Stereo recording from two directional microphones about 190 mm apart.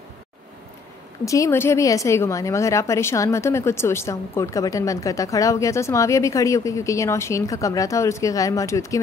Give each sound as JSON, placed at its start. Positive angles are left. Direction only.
{"t": 1.2, "sound": "a woman's voice", "side_deg": 15}